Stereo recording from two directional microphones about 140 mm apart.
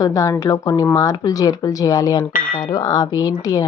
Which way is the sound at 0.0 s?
25° left (ahead or behind).